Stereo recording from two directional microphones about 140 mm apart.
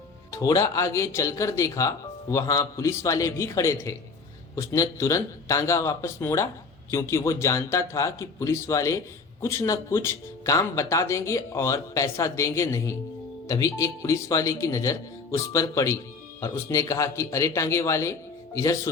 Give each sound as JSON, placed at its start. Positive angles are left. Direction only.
{"t": 0.3, "sound": "speech", "side_deg": 25}